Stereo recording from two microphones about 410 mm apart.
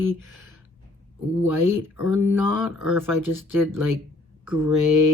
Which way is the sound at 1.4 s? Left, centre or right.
Centre.